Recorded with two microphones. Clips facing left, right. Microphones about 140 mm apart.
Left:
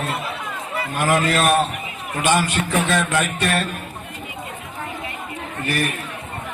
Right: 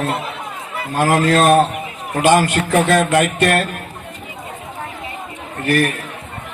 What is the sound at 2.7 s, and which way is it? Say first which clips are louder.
Speech: right 7 dB; 50° right (ahead or behind).